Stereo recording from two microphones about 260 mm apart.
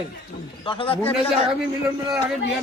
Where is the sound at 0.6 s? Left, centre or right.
Centre.